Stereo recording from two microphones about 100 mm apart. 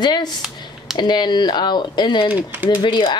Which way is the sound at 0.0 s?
45° left (ahead or behind).